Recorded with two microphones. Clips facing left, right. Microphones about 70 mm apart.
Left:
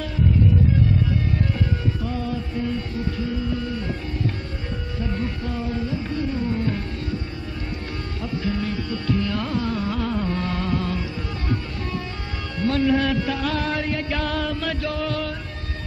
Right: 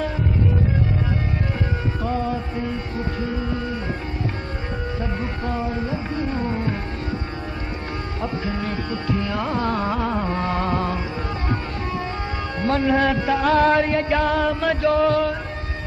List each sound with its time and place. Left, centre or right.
2.0 s music: right
5.2 s music: right
8.2 s music: right
9.6 s music: right
9.9 s music: right
12.6 s music: right